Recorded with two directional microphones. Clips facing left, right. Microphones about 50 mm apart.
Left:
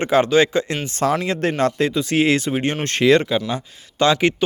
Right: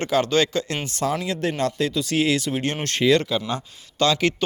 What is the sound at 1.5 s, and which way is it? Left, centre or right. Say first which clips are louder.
Speech: left 4 dB; left.